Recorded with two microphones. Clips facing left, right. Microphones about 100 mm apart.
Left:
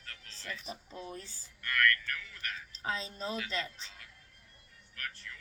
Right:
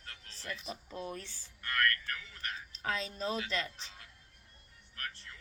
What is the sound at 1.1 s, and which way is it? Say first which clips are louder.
Speech: right 1 dB; 35° left (ahead or behind).